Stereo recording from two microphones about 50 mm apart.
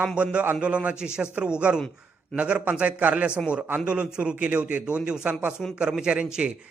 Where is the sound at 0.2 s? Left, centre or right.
Right.